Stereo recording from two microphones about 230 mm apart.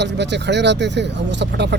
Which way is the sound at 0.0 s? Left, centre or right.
Right.